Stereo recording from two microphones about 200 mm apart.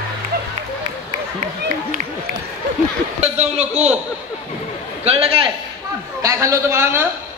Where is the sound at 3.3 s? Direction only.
35° right (ahead or behind).